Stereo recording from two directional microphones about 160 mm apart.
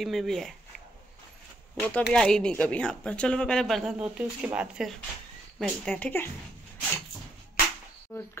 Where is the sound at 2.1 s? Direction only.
5° left (ahead or behind).